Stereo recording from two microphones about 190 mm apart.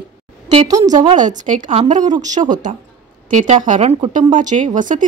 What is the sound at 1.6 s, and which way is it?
A woman's voice, 30° right (ahead or behind).